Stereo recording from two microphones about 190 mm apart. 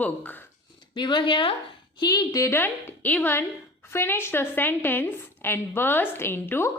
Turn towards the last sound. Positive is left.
turn(degrees=10)  # may be behind; listen again after turning